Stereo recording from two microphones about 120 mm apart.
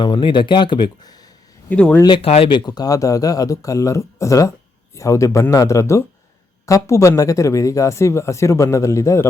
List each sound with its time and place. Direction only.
0.0 s speech: 40° left (ahead or behind)
1.7 s speech: 10° left (ahead or behind)
2.0 s speech: 50° left (ahead or behind); by 9.2 s 25° left (ahead or behind)